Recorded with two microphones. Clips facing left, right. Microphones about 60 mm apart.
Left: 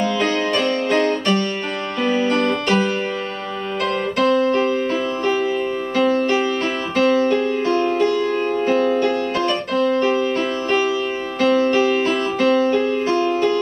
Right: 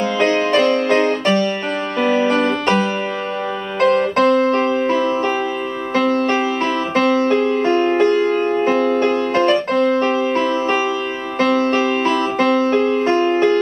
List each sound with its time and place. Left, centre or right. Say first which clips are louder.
0.0 s music: right 3 dB; centre
4.2 s keyboard: left 1 dB; right
6.0 s music: even; centre
7.2 s music: right 3 dB; right
8.5 s music: right 2 dB; right
9.0 s music: right 3 dB; right
11.5 s music: left 2 dB; centre
12.6 s music: right 2 dB; right
13.3 s music: right 3 dB; right